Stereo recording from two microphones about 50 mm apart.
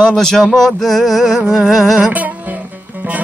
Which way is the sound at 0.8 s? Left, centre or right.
Centre.